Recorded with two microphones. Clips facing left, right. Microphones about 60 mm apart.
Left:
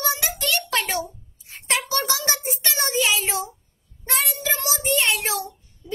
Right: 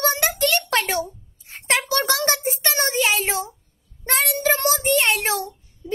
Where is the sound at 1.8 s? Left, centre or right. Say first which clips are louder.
Right 3 dB; right.